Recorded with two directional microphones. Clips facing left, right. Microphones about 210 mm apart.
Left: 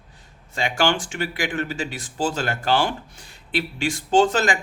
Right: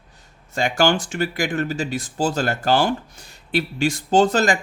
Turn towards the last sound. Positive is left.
turn(degrees=-40)  # may be behind; listen again after turning